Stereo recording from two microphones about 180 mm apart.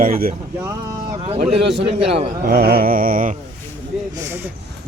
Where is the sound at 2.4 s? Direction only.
55° right (ahead or behind).